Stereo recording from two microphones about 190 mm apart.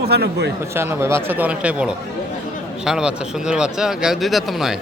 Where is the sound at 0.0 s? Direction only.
60° right (ahead or behind).